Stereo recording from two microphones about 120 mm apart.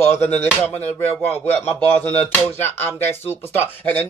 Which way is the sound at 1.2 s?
15° left (ahead or behind).